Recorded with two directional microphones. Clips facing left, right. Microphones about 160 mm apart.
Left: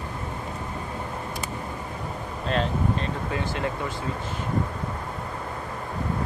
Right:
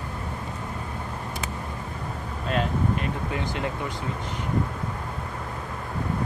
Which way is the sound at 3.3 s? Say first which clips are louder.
Left 1 dB; 20° right (ahead or behind).